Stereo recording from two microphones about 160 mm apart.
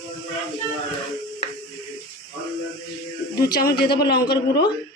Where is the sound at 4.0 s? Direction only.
85° left.